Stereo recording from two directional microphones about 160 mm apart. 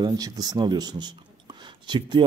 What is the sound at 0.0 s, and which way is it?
Speech, 25° right (ahead or behind).